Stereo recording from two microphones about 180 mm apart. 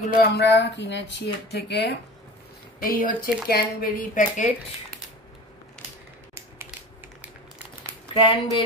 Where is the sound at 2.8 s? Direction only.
50° left (ahead or behind).